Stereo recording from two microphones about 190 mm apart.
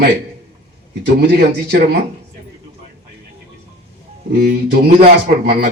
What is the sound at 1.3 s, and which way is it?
Speech, 50° right (ahead or behind).